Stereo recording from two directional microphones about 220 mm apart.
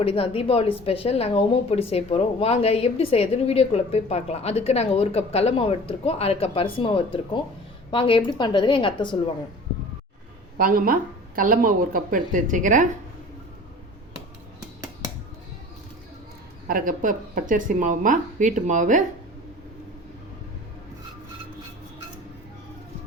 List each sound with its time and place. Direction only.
0.0 s a woman's voice: 25° left (ahead or behind)
10.6 s a woman's voice: 40° right (ahead or behind)
16.6 s a woman's voice: 40° right (ahead or behind)